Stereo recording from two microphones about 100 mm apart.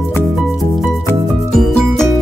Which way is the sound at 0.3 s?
Centre (ahead or behind).